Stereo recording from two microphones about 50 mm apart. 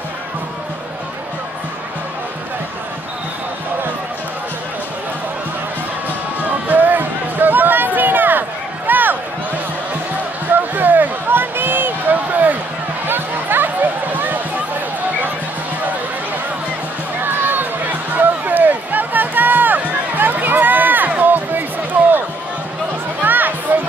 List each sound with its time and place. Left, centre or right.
6.7 s a sound: right
10.5 s basketball bounce: right
13.0 s music: right
17.2 s run: right
21.1 s a sound: right
23.2 s music: right